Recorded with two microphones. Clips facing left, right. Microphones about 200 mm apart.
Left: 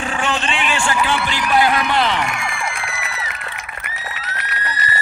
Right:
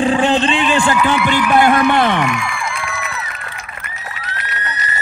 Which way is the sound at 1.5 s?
50° right (ahead or behind).